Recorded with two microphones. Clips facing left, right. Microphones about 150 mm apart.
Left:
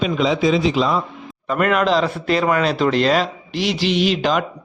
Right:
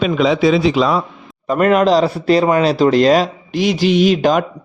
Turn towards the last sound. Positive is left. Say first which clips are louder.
# right 5 dB
turn(degrees=-45)  # may be behind; listen again after turning